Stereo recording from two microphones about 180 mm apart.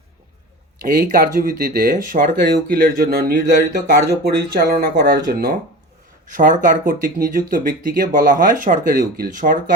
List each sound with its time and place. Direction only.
0.8 s speech: 50° right (ahead or behind)